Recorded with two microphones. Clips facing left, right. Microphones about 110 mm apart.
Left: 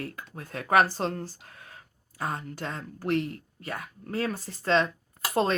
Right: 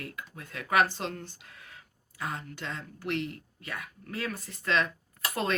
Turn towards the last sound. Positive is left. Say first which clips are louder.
# left 5 dB
turn(degrees=30)  # may be behind; listen again after turning